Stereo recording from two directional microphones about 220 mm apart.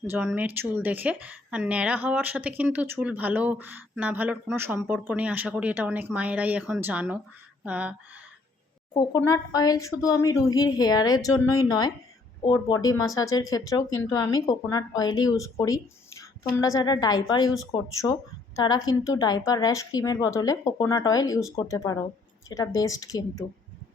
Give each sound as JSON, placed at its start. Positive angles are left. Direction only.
{"t": 0.1, "sound": "speech", "side_deg": -5}
{"t": 8.9, "sound": "speech", "side_deg": 15}